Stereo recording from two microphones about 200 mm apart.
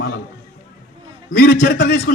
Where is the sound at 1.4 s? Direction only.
45° left (ahead or behind).